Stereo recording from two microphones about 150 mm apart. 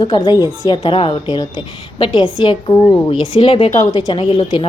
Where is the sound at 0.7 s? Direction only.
35° left (ahead or behind).